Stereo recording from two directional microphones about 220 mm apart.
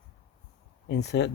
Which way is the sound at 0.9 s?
50° left (ahead or behind).